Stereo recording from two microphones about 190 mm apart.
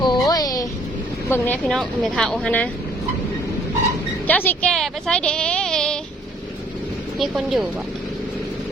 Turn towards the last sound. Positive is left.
turn(degrees=0)  # may be behind; listen again after turning